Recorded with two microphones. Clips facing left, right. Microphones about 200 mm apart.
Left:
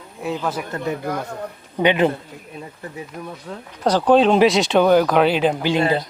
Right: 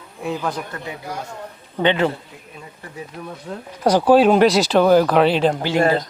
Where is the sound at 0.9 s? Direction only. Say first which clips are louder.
Left 6 dB; 55° left (ahead or behind).